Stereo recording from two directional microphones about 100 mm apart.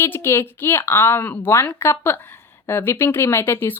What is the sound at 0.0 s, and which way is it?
Speech, 25° left (ahead or behind).